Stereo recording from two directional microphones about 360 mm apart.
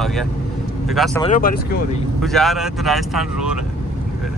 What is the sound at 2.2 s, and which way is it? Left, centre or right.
Speech, centre.